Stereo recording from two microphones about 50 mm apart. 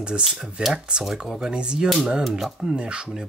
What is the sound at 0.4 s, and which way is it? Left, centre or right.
Speech, centre.